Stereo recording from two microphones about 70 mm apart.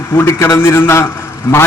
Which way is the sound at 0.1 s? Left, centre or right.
Left.